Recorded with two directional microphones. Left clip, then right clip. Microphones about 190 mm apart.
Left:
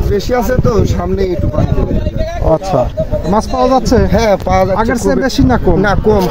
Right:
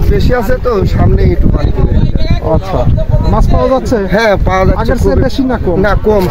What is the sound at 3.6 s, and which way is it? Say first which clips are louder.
Speech: even; 40° left (ahead or behind).